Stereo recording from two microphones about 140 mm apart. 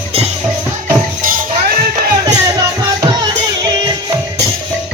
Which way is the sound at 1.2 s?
80° right.